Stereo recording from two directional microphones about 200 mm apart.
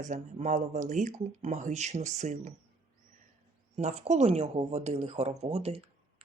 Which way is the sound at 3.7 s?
30° right (ahead or behind).